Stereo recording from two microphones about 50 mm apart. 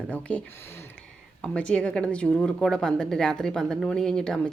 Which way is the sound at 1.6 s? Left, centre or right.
Left.